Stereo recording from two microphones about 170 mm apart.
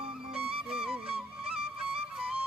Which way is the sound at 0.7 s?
5° right (ahead or behind).